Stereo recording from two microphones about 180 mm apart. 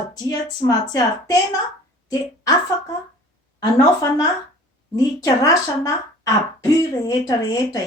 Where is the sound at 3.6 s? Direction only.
20° left (ahead or behind).